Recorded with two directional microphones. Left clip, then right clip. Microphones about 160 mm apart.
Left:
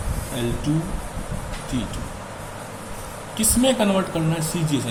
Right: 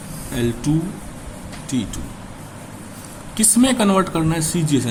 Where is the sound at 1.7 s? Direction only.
45° right (ahead or behind).